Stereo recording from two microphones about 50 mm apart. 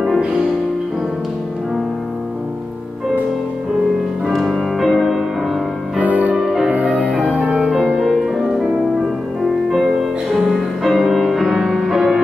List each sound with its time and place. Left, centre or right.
4.3 s music: centre
5.9 s music: right
6.3 s music: centre
6.7 s music: right
8.0 s music: centre
10.3 s music: centre